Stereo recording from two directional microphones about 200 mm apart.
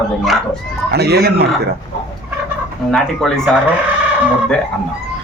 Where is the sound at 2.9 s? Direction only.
Centre (ahead or behind).